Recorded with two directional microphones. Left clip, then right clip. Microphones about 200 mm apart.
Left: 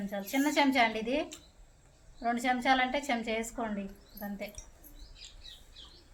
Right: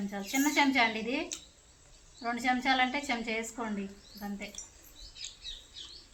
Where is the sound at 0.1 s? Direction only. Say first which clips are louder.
Even; 30° left (ahead or behind).